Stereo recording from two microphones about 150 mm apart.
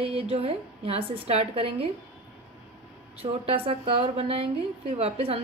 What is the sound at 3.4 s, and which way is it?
A woman's voice, 40° right (ahead or behind).